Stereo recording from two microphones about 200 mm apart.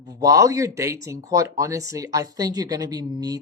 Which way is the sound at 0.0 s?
20° right (ahead or behind).